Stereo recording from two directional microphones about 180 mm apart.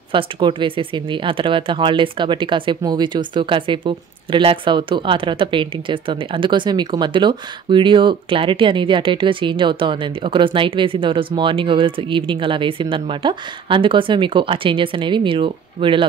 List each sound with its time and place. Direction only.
0.1 s speech: 30° right (ahead or behind)